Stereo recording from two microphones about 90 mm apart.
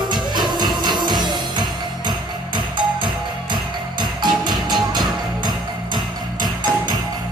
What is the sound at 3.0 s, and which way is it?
Music, 55° right (ahead or behind).